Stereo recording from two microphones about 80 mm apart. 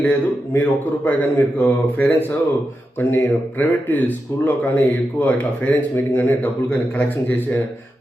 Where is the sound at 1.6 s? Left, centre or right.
Left.